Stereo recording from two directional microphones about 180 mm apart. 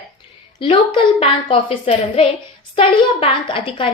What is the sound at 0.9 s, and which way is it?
A woman's voice, 30° left (ahead or behind).